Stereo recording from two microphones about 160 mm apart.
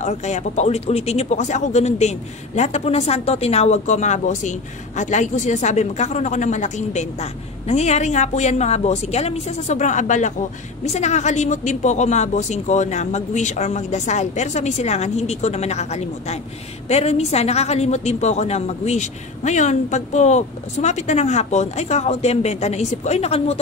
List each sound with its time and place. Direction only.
0.0 s speech: 45° left (ahead or behind)